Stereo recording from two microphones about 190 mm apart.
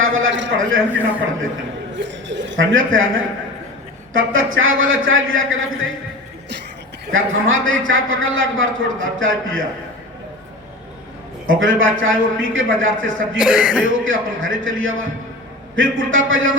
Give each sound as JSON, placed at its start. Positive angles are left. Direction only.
{"t": 0.0, "sound": "a man's voice", "side_deg": -90}
{"t": 2.0, "sound": "a man's voice", "side_deg": -70}
{"t": 7.1, "sound": "a man's voice", "side_deg": -90}
{"t": 11.4, "sound": "a man's voice", "side_deg": -90}
{"t": 13.3, "sound": "speech", "side_deg": -5}
{"t": 13.8, "sound": "a man's voice", "side_deg": -90}